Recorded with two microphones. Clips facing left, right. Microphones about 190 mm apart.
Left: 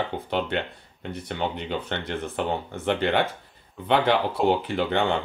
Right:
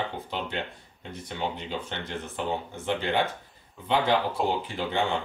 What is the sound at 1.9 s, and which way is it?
Speech, 65° left (ahead or behind).